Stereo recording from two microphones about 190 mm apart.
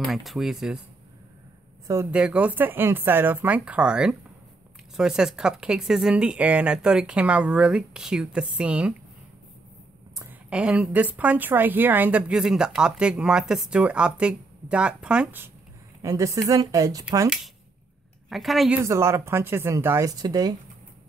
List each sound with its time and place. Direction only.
0.0 s speech: centre (ahead or behind)
1.9 s speech: 10° right (ahead or behind)
10.5 s speech: 5° right (ahead or behind)
18.3 s speech: centre (ahead or behind)
18.9 s speech: 15° right (ahead or behind)